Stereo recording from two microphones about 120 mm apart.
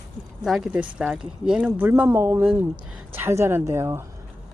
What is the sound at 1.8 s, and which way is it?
A woman's voice, 20° right (ahead or behind).